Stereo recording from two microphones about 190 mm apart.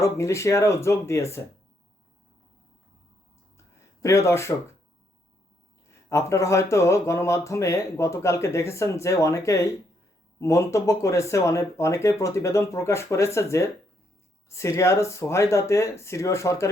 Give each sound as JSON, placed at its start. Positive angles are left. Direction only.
{"t": 0.0, "sound": "speech", "side_deg": 15}
{"t": 4.0, "sound": "speech", "side_deg": 15}
{"t": 6.1, "sound": "speech", "side_deg": 15}